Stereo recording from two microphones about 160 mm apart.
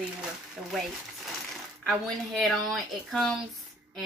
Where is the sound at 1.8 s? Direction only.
Centre (ahead or behind).